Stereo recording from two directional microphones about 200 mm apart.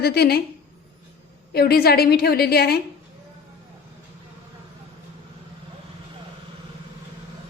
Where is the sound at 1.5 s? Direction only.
50° left (ahead or behind).